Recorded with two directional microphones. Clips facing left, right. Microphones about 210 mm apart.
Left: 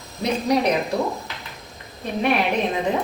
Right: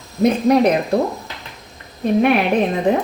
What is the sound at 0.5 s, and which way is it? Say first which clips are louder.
Speech: right 6 dB; 50° right (ahead or behind).